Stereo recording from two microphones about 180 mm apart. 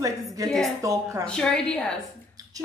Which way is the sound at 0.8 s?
20° right (ahead or behind).